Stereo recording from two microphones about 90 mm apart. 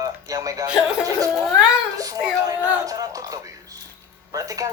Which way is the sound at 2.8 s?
40° right (ahead or behind).